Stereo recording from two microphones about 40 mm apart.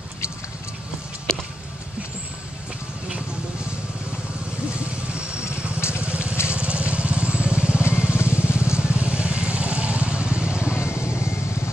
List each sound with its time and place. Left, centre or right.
5.9 s vehicle: right